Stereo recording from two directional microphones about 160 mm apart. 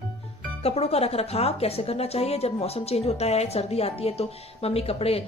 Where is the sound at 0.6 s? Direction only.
40° left (ahead or behind).